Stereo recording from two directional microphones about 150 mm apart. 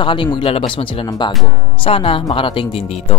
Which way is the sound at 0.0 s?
35° left (ahead or behind).